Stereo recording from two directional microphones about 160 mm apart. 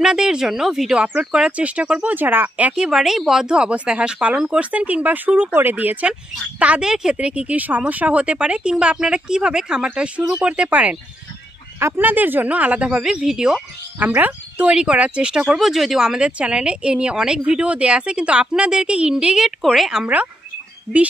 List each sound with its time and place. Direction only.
0.0 s speech: 5° right (ahead or behind)